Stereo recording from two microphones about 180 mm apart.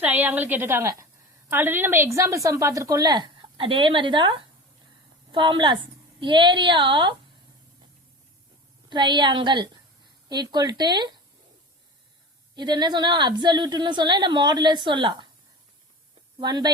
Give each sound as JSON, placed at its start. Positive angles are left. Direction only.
{"t": 0.0, "sound": "a woman's voice", "side_deg": -10}
{"t": 8.9, "sound": "a woman's voice", "side_deg": -25}
{"t": 12.5, "sound": "a woman's voice", "side_deg": -25}
{"t": 16.4, "sound": "a woman's voice", "side_deg": -20}